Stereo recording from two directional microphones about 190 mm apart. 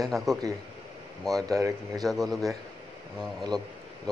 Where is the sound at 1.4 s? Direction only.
20° right (ahead or behind).